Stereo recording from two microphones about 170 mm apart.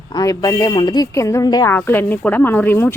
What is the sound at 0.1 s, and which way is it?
Speech, 20° left (ahead or behind).